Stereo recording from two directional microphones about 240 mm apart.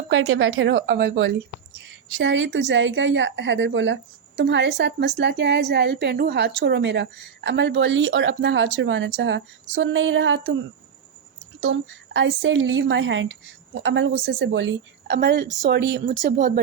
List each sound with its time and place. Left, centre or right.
0.1 s a woman's voice: right
11.6 s a woman's voice: right